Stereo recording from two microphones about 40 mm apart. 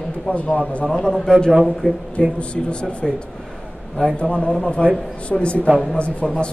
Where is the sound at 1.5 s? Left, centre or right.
Centre.